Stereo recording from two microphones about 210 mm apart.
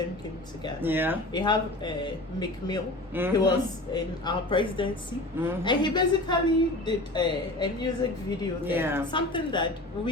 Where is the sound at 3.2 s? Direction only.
10° right (ahead or behind).